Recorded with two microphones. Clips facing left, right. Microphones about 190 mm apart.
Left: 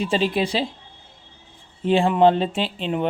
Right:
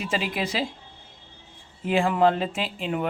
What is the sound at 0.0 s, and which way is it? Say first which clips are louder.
Speech: left 6 dB; 30° left (ahead or behind).